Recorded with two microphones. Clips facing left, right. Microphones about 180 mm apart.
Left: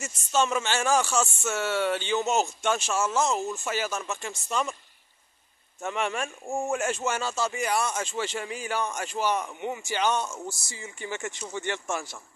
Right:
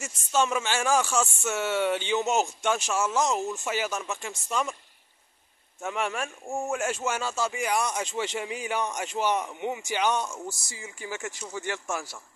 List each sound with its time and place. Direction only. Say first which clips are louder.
0.0 s speech: even; 10° right (ahead or behind)
5.8 s speech: left 1 dB; 5° right (ahead or behind)